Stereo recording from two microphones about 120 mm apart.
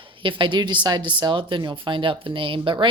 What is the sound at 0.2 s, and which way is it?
Speech, 45° right (ahead or behind).